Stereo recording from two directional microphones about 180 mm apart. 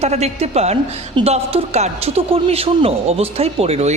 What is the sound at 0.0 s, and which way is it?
Speech, 35° right (ahead or behind).